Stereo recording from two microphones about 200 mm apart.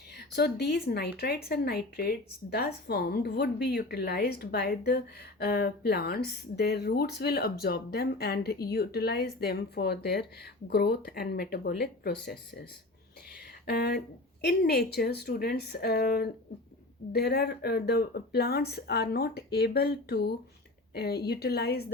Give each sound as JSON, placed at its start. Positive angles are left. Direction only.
{"t": 0.2, "sound": "speech", "side_deg": 55}
{"t": 13.7, "sound": "speech", "side_deg": 55}